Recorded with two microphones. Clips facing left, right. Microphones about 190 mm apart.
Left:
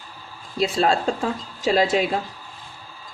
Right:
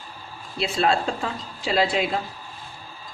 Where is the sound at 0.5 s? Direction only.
40° left (ahead or behind).